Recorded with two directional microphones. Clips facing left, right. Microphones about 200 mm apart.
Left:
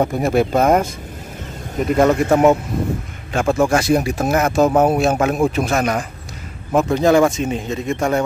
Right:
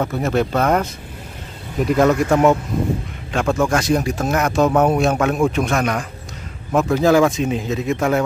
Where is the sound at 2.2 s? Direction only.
20° left (ahead or behind).